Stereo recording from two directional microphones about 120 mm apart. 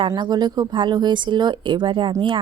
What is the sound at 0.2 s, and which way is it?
A woman's voice, 35° right (ahead or behind).